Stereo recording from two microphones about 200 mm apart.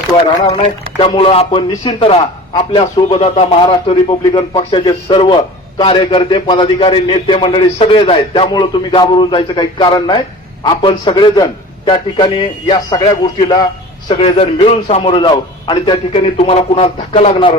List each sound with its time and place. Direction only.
0.4 s a man's voice: 30° left (ahead or behind)